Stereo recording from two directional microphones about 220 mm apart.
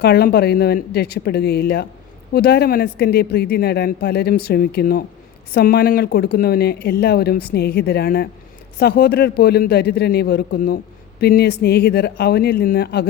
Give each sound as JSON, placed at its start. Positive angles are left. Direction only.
{"t": 0.0, "sound": "speech", "side_deg": 45}